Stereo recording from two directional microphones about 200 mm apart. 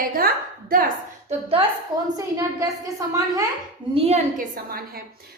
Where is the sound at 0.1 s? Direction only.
45° right (ahead or behind).